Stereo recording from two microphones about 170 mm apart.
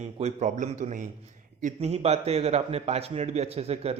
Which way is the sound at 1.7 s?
40° right (ahead or behind).